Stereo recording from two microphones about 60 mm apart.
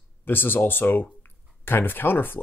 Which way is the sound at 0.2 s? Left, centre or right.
Left.